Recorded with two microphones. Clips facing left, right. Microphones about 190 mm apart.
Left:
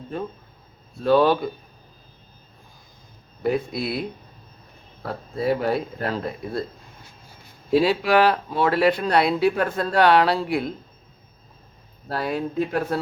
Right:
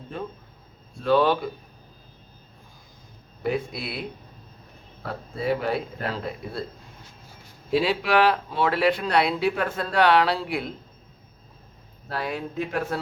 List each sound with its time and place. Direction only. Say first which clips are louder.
0.1 s speech: left 4 dB; 45° left (ahead or behind)
3.7 s speech: left 7 dB; 40° left (ahead or behind)
5.4 s speech: left 3 dB; 40° left (ahead or behind)
7.7 s speech: left 4 dB; 40° left (ahead or behind)
12.0 s speech: left 4 dB; 40° left (ahead or behind)